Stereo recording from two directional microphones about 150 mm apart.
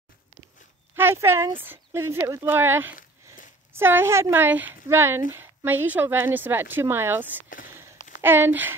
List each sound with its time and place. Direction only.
0.9 s speech: 15° right (ahead or behind)